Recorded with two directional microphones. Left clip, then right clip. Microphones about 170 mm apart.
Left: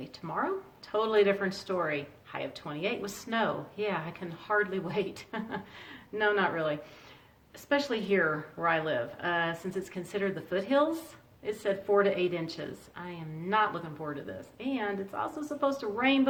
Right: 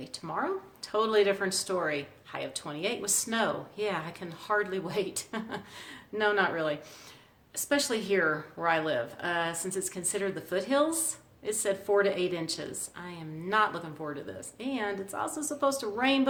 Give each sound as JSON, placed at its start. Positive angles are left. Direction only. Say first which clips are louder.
{"t": 0.0, "sound": "speech", "louder": "even", "side_deg": -25}